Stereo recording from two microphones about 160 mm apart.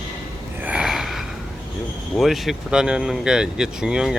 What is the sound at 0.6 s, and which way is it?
Snort, 5° right (ahead or behind).